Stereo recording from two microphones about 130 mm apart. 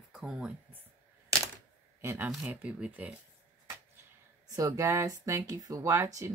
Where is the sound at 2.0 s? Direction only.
20° right (ahead or behind).